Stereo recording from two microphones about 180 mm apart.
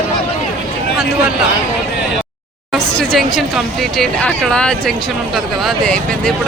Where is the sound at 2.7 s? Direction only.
Centre (ahead or behind).